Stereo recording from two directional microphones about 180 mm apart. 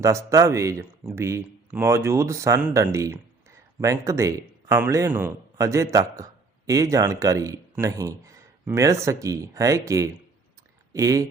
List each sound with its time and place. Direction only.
0.0 s speech: 15° right (ahead or behind)